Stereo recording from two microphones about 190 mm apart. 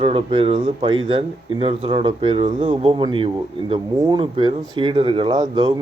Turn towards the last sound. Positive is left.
turn(degrees=-25)  # may be behind; listen again after turning